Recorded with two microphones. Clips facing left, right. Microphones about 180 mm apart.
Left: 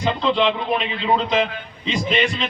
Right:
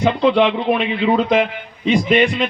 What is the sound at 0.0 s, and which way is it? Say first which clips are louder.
Speech: right 5 dB; 60° right (ahead or behind).